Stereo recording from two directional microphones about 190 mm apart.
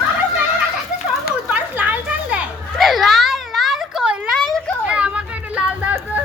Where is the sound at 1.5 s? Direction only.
10° right (ahead or behind).